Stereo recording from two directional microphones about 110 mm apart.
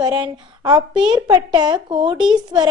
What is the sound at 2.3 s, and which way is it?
Speech, 40° right (ahead or behind).